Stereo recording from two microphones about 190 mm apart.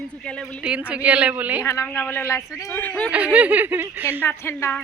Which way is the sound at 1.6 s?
15° left (ahead or behind).